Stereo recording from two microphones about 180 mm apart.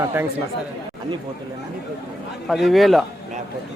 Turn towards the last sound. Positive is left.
turn(degrees=0)  # may be behind; listen again after turning